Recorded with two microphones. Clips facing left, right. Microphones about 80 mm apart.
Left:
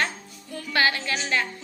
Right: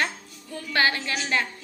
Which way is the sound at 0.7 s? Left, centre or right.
Right.